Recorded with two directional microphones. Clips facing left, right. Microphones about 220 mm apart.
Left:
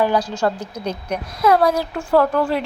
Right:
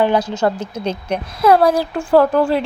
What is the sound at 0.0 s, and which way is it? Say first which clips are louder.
Speech: right 3 dB; 25° right (ahead or behind).